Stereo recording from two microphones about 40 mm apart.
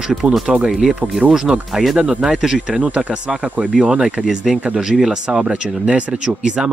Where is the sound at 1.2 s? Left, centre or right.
Right.